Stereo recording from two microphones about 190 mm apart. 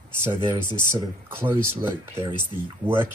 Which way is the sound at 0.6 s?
10° right (ahead or behind).